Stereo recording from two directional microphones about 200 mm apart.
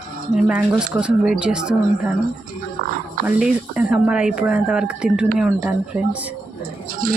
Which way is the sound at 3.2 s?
5° right (ahead or behind).